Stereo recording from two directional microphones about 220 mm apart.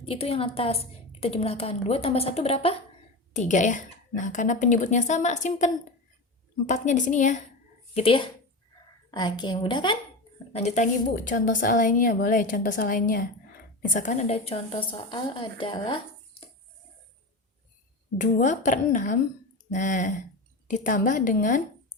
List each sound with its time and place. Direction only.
0.0 s a woman's voice: 25° left (ahead or behind)
10.5 s a woman's voice: 30° left (ahead or behind)
18.2 s a woman's voice: 35° left (ahead or behind)